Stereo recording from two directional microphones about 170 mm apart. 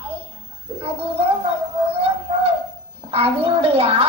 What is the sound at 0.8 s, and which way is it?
Bird, 35° right (ahead or behind).